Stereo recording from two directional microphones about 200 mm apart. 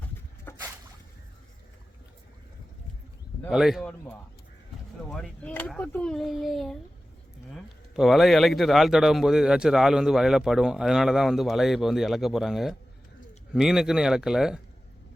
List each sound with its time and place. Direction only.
0.5 s boat: 10° left (ahead or behind)
3.5 s a man's voice: centre (ahead or behind)
5.0 s a man's voice: 5° left (ahead or behind)